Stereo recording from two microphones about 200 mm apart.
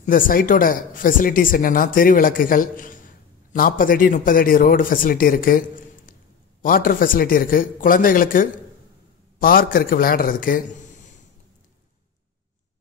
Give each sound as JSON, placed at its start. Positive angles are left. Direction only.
{"t": 0.0, "sound": "speech", "side_deg": 45}